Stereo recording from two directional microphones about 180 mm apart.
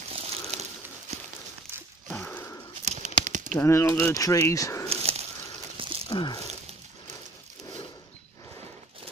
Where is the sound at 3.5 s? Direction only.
15° left (ahead or behind).